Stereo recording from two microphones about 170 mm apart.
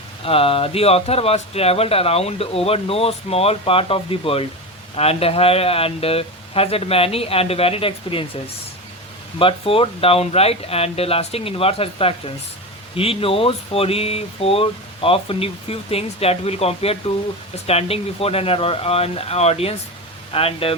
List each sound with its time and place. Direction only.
0.3 s speech: 35° left (ahead or behind)
9.4 s speech: 35° left (ahead or behind)